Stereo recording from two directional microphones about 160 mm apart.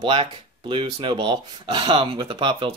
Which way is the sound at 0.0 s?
30° right (ahead or behind).